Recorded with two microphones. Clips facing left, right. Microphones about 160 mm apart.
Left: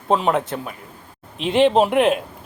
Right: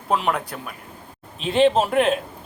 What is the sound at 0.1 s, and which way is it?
Speech, 20° left (ahead or behind).